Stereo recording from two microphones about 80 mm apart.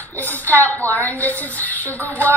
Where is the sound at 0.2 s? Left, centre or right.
Left.